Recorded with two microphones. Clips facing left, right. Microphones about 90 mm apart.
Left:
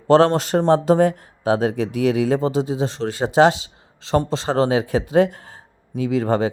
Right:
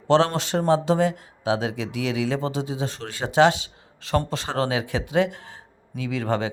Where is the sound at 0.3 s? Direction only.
40° left (ahead or behind).